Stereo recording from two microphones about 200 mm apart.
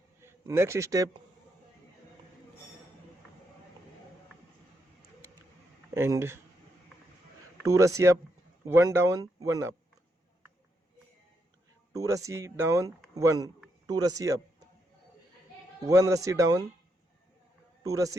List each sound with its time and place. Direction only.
0.2 s a man's voice: 10° right (ahead or behind)
5.9 s speech: 15° right (ahead or behind)
7.6 s speech: 15° right (ahead or behind)
11.9 s speech: 15° right (ahead or behind)
15.8 s speech: 15° right (ahead or behind)
17.8 s speech: 15° right (ahead or behind)